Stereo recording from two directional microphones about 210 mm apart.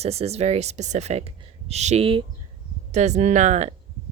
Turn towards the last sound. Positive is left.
turn(degrees=-30)  # may be behind; listen again after turning